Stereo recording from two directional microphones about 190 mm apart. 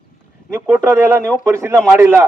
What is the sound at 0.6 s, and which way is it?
A man's voice, 10° right (ahead or behind).